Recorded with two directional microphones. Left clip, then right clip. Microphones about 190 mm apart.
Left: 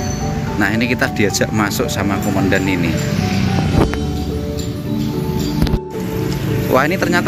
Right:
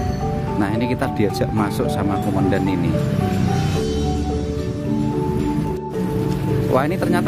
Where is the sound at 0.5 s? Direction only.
10° right (ahead or behind).